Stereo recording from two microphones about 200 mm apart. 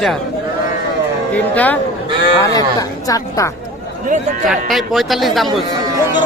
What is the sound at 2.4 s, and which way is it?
A woman's voice, 20° left (ahead or behind).